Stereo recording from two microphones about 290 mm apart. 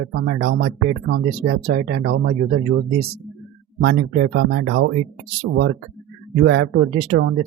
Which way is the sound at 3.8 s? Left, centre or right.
Right.